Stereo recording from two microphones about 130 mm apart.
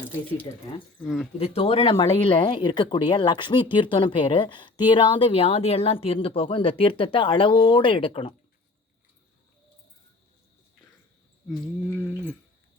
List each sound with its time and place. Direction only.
0.5 s speech: 30° left (ahead or behind)
1.0 s speech: 5° right (ahead or behind)
1.4 s speech: 50° left (ahead or behind)
11.4 s a sound: 15° left (ahead or behind)